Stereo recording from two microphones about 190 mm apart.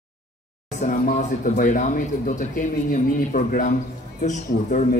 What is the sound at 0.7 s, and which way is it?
Speech, 40° left (ahead or behind).